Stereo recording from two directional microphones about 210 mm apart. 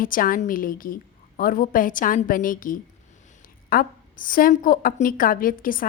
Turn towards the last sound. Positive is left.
turn(degrees=40)  # may be behind; listen again after turning